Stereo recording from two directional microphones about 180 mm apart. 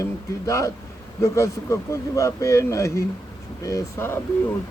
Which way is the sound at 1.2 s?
15° left (ahead or behind).